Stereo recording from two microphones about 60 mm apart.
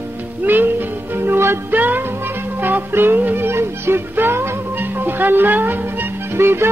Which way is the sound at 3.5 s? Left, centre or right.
Right.